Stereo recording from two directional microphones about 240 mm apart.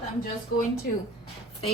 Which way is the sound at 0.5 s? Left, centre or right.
Left.